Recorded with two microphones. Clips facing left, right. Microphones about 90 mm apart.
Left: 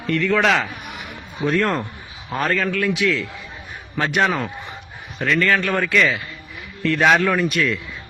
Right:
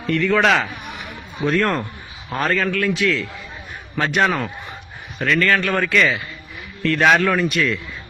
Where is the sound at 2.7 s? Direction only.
15° left (ahead or behind); by 7.6 s centre (ahead or behind).